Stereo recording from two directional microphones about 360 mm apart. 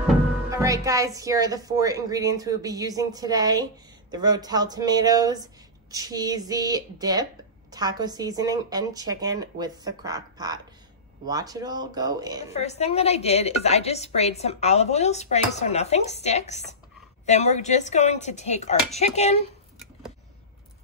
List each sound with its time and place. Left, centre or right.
0.5 s a woman's voice: centre
12.5 s a woman's voice: centre